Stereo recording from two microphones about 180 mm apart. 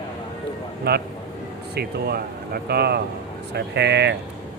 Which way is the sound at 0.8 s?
65° right (ahead or behind).